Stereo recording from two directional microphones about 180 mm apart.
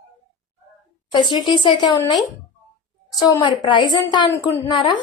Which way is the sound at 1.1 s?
25° left (ahead or behind).